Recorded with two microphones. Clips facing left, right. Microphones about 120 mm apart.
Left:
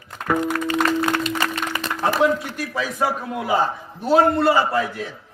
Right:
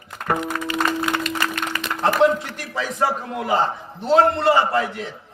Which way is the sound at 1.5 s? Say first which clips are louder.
Left 1 dB; 30° left (ahead or behind).